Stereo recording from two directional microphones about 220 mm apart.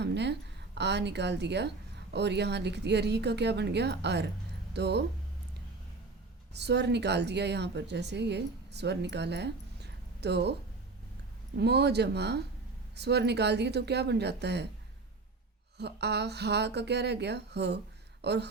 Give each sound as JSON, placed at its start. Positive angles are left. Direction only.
{"t": 0.0, "sound": "a woman's voice", "side_deg": -50}
{"t": 6.5, "sound": "speech", "side_deg": -50}
{"t": 11.5, "sound": "speech", "side_deg": -50}
{"t": 15.8, "sound": "speech", "side_deg": -50}